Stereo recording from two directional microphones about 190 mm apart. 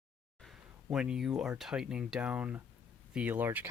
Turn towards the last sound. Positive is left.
turn(degrees=-10)  # may be behind; listen again after turning